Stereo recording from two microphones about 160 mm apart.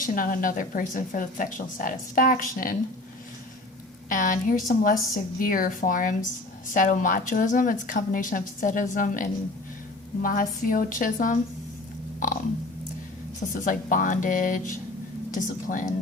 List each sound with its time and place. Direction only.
0.0 s a woman's voice: 60° left (ahead or behind)
4.1 s a woman's voice: 55° left (ahead or behind)
13.5 s a woman's voice: 55° left (ahead or behind)